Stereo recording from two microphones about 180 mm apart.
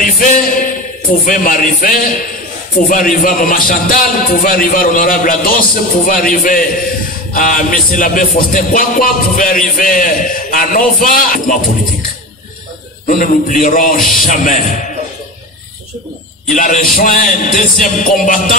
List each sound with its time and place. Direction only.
0.0 s speech: 50° left (ahead or behind)
13.0 s speech: 45° left (ahead or behind)
16.5 s speech: 45° left (ahead or behind)